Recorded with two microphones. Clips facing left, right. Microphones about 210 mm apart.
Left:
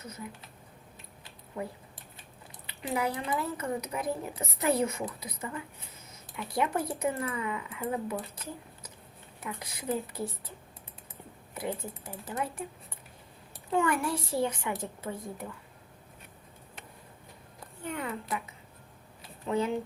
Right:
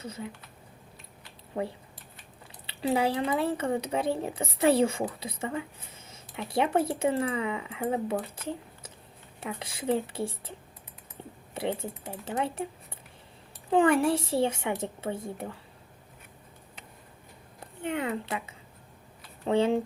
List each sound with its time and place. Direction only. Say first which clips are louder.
0.0 s speech: right 4 dB; 30° right (ahead or behind)
2.6 s speech: right 5 dB; 30° right (ahead or behind)
9.4 s speech: right 4 dB; 30° right (ahead or behind)
13.7 s speech: right 6 dB; 30° right (ahead or behind)
17.8 s speech: right 5 dB; 25° right (ahead or behind)
19.5 s speech: right 5 dB; 30° right (ahead or behind)